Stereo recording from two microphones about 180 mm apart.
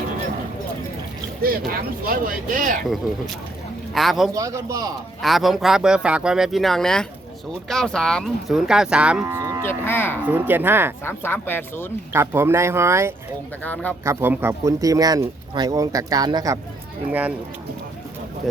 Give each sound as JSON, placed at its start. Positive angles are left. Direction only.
{"t": 1.4, "sound": "speech", "side_deg": -55}
{"t": 3.9, "sound": "cattle", "side_deg": 0}
{"t": 4.4, "sound": "speech", "side_deg": -20}
{"t": 5.2, "sound": "cattle", "side_deg": 0}
{"t": 9.6, "sound": "speech", "side_deg": 10}
{"t": 10.2, "sound": "speech", "side_deg": -10}
{"t": 11.0, "sound": "speech", "side_deg": 10}
{"t": 12.1, "sound": "speech", "side_deg": -15}
{"t": 17.1, "sound": "speech", "side_deg": -10}